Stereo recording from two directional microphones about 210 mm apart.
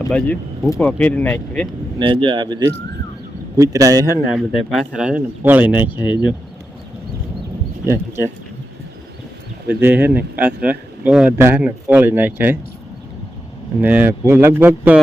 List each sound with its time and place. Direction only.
0.1 s speech: 5° left (ahead or behind)
2.0 s speech: 25° right (ahead or behind)
4.3 s speech: centre (ahead or behind)
7.9 s speech: 10° right (ahead or behind)
9.6 s speech: 10° right (ahead or behind)
13.8 s speech: 10° right (ahead or behind)